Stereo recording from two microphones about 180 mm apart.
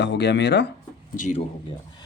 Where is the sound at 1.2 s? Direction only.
40° left (ahead or behind).